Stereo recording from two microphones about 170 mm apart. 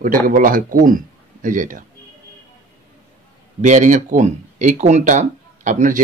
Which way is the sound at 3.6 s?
45° right (ahead or behind).